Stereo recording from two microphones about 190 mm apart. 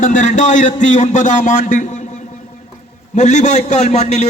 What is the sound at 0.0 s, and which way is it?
A man's voice, 40° left (ahead or behind).